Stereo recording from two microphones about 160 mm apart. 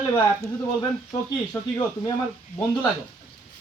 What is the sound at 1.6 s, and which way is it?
Speech, 15° left (ahead or behind).